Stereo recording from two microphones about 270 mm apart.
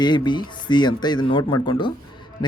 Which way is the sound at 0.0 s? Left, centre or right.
Centre.